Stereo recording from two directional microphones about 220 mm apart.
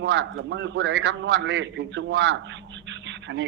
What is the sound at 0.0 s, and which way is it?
A man's voice, 55° right (ahead or behind).